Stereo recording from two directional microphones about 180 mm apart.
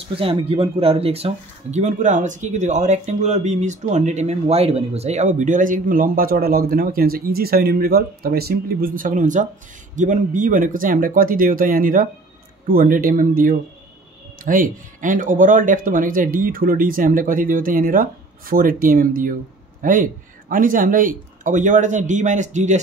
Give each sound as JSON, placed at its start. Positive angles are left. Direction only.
{"t": 0.1, "sound": "speech", "side_deg": -30}